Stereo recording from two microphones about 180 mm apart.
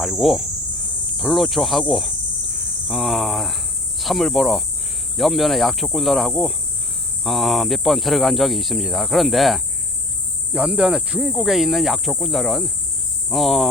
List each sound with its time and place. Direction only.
0.0 s speech: centre (ahead or behind)